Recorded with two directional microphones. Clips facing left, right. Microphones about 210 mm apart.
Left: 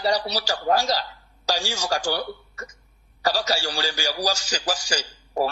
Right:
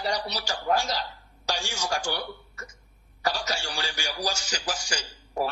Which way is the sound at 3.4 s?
35° left (ahead or behind).